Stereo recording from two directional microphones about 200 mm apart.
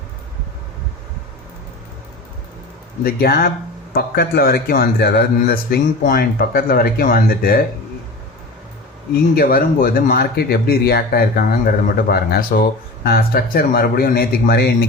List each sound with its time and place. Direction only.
3.0 s a man's voice: 50° left (ahead or behind)
9.3 s a man's voice: 50° left (ahead or behind)